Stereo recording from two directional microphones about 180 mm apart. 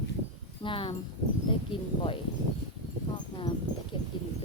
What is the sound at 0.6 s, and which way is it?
Speech, 30° left (ahead or behind).